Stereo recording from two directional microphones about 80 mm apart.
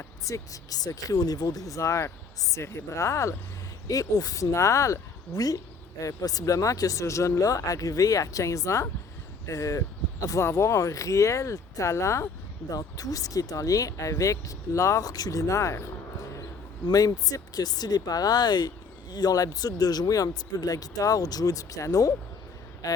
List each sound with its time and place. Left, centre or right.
0.3 s speech: left
12.7 s speech: left
16.8 s speech: left